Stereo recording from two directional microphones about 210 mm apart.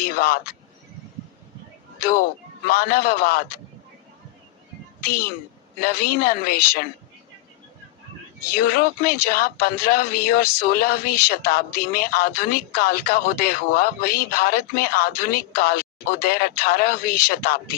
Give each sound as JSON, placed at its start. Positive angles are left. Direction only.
{"t": 0.0, "sound": "speech", "side_deg": 45}
{"t": 2.0, "sound": "speech", "side_deg": 45}
{"t": 5.0, "sound": "speech", "side_deg": 45}
{"t": 8.4, "sound": "speech", "side_deg": 45}